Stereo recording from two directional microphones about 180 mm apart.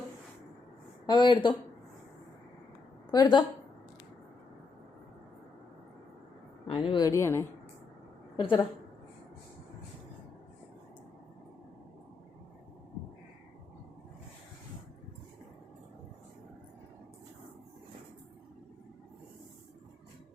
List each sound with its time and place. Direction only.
1.1 s a woman's voice: 25° left (ahead or behind)
3.1 s a woman's voice: 25° left (ahead or behind)
6.7 s a woman's voice: 25° left (ahead or behind)
8.4 s a woman's voice: 30° left (ahead or behind)